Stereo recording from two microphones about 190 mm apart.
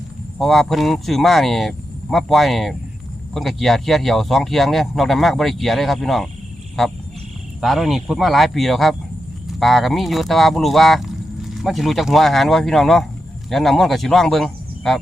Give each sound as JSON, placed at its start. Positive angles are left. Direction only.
{"t": 0.3, "sound": "speech", "side_deg": 0}